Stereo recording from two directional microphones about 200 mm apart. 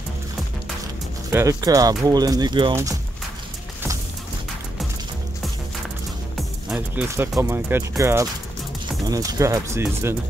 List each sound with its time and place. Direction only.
1.3 s speech: 15° right (ahead or behind)
6.7 s speech: 10° right (ahead or behind)